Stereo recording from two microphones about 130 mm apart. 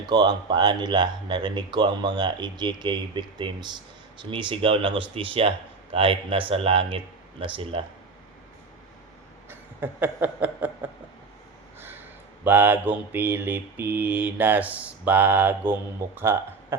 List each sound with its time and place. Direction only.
0.0 s speech: 35° right (ahead or behind)
9.5 s a sound: 15° right (ahead or behind)
12.5 s mantra: 15° right (ahead or behind)
16.1 s speech: 15° right (ahead or behind)